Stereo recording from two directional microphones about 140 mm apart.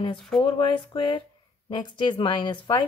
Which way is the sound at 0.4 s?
35° left (ahead or behind).